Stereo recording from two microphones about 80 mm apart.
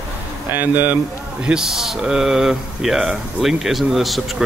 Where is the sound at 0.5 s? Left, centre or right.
Right.